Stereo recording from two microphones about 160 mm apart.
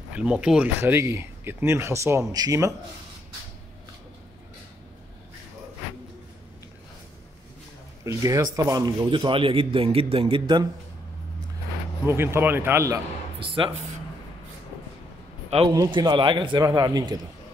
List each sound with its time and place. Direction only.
0.1 s speech: 5° right (ahead or behind)
8.0 s a man's voice: 20° right (ahead or behind)
12.1 s speech: 15° right (ahead or behind)
15.7 s a man's voice: 25° right (ahead or behind)